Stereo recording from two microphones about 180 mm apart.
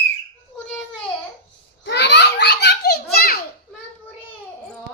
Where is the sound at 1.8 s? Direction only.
75° left (ahead or behind).